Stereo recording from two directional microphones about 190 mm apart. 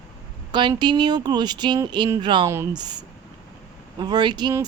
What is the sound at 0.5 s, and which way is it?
Speech, 25° right (ahead or behind).